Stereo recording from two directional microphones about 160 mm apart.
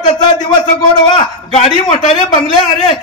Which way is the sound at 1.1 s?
40° left (ahead or behind).